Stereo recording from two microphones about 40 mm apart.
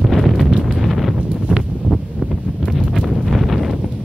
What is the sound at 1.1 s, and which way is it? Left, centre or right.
Wind noise, right.